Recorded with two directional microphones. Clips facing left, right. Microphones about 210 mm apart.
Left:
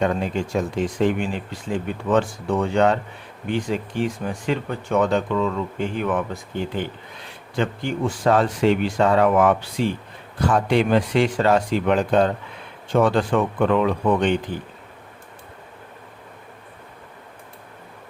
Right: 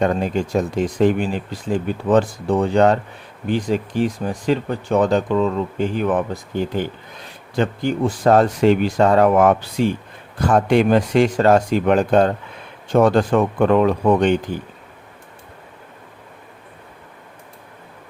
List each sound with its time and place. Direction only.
0.0 s speech: 40° right (ahead or behind)